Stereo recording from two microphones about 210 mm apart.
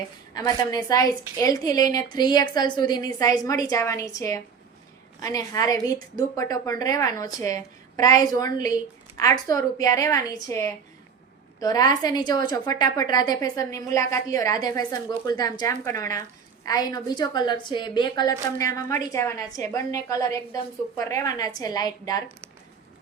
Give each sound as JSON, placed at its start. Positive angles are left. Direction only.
{"t": 0.3, "sound": "a woman's voice", "side_deg": 20}